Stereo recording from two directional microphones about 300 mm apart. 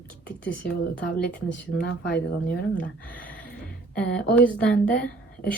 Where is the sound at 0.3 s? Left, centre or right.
Centre.